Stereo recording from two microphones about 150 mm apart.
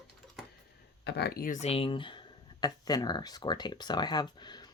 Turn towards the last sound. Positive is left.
turn(degrees=30)  # may be behind; listen again after turning